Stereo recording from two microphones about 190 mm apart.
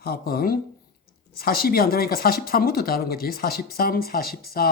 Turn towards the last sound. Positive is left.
turn(degrees=50)  # may be behind; listen again after turning